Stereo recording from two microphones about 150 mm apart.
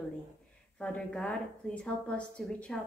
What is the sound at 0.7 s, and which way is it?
A woman's voice, 5° left (ahead or behind).